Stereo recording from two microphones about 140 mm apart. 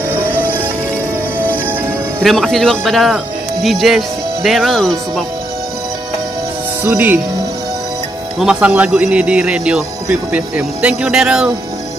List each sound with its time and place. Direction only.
0.2 s music: 10° left (ahead or behind)
1.7 s music: 15° right (ahead or behind)
2.2 s speech: centre (ahead or behind)
6.8 s speech: 15° right (ahead or behind)
8.4 s a man's voice: 10° right (ahead or behind)